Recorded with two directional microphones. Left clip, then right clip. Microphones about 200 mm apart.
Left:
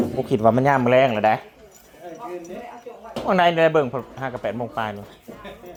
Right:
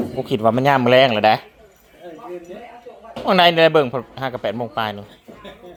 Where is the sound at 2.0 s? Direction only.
55° right (ahead or behind).